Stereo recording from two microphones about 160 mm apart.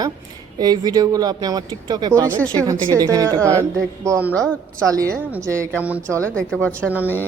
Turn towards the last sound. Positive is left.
turn(degrees=-10)  # may be behind; listen again after turning